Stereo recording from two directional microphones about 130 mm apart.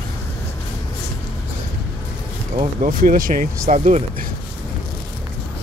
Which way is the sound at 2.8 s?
90° right.